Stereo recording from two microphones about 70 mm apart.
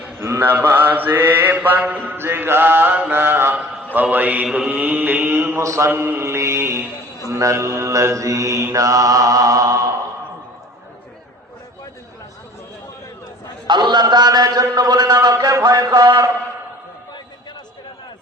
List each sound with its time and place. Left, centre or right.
0.2 s mantra: right
5.6 s mantra: right
5.9 s mantra: right
13.7 s a man's voice: right